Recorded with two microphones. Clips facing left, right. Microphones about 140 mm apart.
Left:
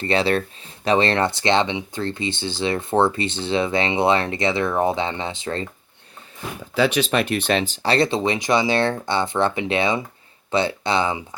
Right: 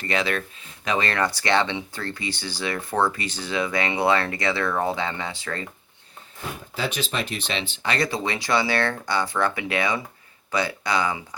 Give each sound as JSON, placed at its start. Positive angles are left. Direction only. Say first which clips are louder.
{"t": 0.0, "sound": "speech", "louder": "left 6 dB", "side_deg": 30}
{"t": 6.7, "sound": "speech", "louder": "left 9 dB", "side_deg": 75}